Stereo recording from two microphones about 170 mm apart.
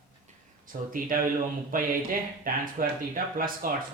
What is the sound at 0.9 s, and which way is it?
Speech, 55° right (ahead or behind).